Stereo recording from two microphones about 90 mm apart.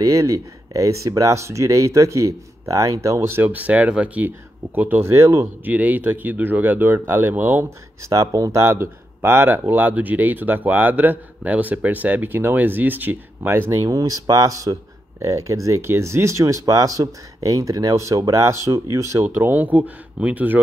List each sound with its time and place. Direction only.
0.0 s speech: 40° right (ahead or behind)
5.7 s speech: 20° right (ahead or behind)
8.0 s speech: 35° right (ahead or behind)
19.2 s speech: 20° right (ahead or behind)